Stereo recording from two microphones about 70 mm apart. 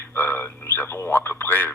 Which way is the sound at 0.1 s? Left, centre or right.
Left.